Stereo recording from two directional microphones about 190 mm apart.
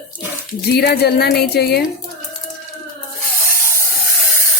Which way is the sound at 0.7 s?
55° left (ahead or behind).